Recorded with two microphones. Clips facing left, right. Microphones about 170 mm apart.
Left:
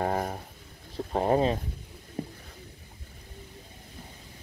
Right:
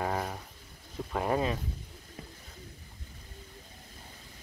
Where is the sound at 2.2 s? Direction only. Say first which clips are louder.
Left 13 dB; 35° left (ahead or behind).